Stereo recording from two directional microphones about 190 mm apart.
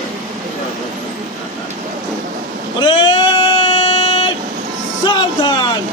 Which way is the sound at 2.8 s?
25° left (ahead or behind).